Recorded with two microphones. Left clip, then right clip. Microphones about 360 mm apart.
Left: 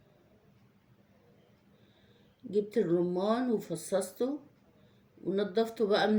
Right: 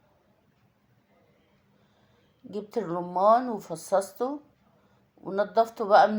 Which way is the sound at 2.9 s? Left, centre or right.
Right.